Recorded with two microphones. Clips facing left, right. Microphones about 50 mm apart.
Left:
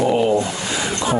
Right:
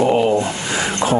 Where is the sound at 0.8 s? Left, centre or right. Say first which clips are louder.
Right 3 dB; right.